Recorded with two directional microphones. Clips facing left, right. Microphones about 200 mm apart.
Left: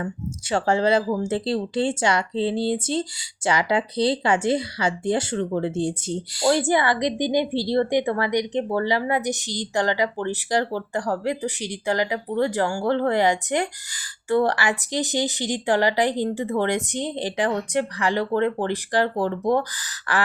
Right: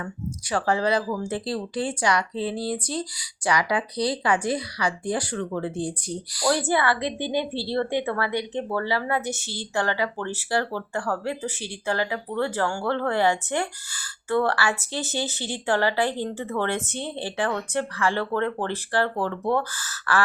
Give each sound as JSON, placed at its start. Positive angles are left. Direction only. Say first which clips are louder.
{"t": 0.5, "sound": "speech", "louder": "left 3 dB", "side_deg": 25}